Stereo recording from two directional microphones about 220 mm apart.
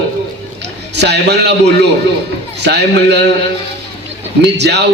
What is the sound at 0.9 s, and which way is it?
Speech, 50° right (ahead or behind).